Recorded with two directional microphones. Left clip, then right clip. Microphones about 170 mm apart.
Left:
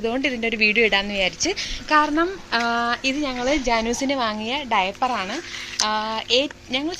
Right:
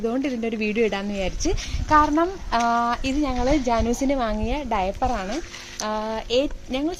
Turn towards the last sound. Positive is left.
turn(degrees=-55)  # may be behind; listen again after turning